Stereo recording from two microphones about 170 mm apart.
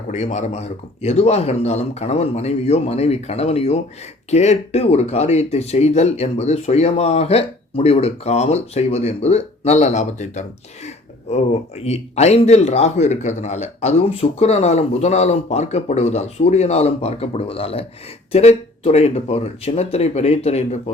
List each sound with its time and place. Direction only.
0.1 s speech: 45° left (ahead or behind)
10.8 s a sound: 40° left (ahead or behind)
11.9 s speech: 40° left (ahead or behind)